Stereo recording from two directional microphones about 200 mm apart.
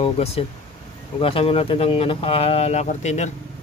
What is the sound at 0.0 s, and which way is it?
Speech, 30° left (ahead or behind).